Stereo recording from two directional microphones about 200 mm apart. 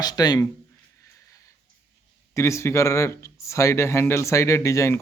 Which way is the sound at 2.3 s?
15° left (ahead or behind).